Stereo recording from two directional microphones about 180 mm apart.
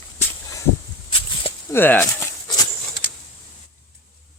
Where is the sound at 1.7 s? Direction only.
10° left (ahead or behind).